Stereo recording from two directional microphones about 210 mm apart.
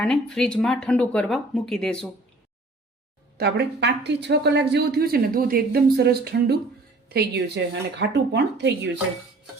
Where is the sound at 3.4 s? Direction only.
55° right (ahead or behind).